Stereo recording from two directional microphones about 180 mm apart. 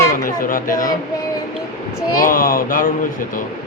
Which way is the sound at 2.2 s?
50° left (ahead or behind).